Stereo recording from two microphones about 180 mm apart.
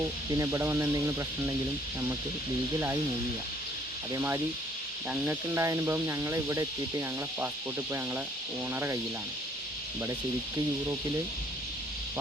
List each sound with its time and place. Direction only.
0.3 s speech: 15° right (ahead or behind)
5.1 s speech: 10° right (ahead or behind)
8.7 s speech: 15° right (ahead or behind)